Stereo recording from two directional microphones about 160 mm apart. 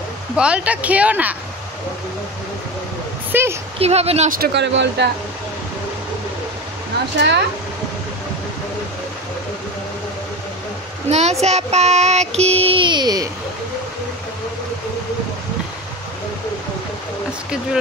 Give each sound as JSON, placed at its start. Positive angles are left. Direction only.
{"t": 0.4, "sound": "a woman's voice", "side_deg": -5}
{"t": 3.3, "sound": "a sound", "side_deg": -15}
{"t": 3.8, "sound": "child singing", "side_deg": -40}
{"t": 4.3, "sound": "speech", "side_deg": -80}
{"t": 7.2, "sound": "speech", "side_deg": -90}
{"t": 11.1, "sound": "a child's voice", "side_deg": -45}
{"t": 11.4, "sound": "child singing", "side_deg": -45}